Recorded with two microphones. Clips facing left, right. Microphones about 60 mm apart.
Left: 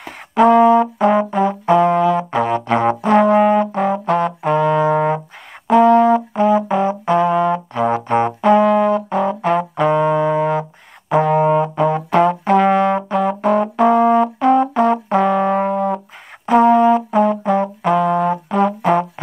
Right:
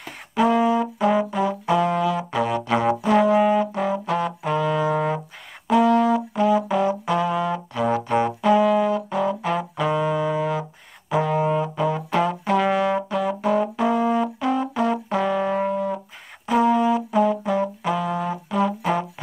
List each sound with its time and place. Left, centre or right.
0.3 s brass instrument: left
18.8 s music: left